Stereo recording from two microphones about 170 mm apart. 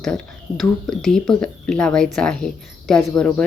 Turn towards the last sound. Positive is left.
turn(degrees=5)  # may be behind; listen again after turning